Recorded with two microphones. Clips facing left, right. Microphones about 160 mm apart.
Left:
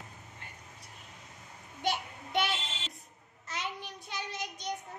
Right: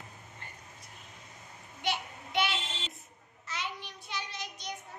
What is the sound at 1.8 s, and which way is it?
Child singing, 45° left (ahead or behind).